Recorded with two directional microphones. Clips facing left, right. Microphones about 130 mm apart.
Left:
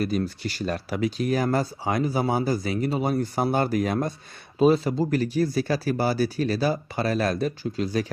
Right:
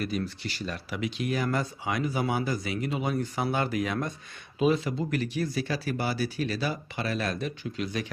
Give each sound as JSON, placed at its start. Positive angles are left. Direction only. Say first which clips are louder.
{"t": 0.0, "sound": "speech", "louder": "left 5 dB", "side_deg": 40}